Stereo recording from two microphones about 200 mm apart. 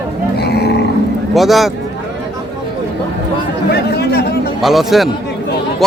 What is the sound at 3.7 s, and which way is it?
Chatter, 55° left (ahead or behind).